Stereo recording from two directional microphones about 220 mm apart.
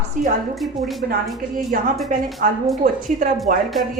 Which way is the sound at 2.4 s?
40° right (ahead or behind).